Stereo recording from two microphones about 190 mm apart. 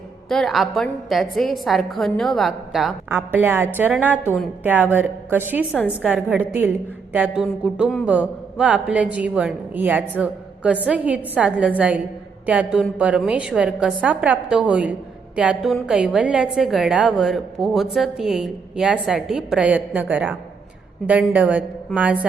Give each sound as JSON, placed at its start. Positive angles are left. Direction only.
{"t": 0.3, "sound": "a woman's voice", "side_deg": 0}
{"t": 3.1, "sound": "a woman's voice", "side_deg": -10}